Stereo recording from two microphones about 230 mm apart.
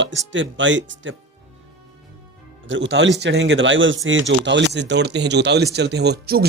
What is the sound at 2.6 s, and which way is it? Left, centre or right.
Speech, right.